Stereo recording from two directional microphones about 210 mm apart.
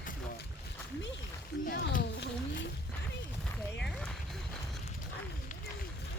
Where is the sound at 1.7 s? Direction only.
45° left (ahead or behind).